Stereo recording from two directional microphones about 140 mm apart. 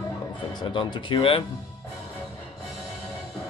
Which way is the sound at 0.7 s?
35° left (ahead or behind).